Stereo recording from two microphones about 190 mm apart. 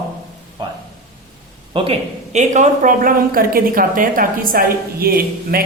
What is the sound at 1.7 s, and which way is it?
Speech, 35° right (ahead or behind).